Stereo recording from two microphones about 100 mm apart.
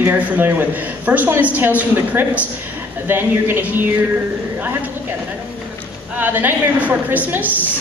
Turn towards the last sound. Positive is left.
turn(degrees=-15)  # may be behind; listen again after turning